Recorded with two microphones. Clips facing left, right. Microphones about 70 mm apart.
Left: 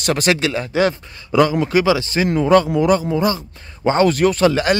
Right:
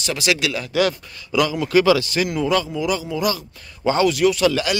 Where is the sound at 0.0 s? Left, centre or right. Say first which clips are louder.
Left 4 dB; left.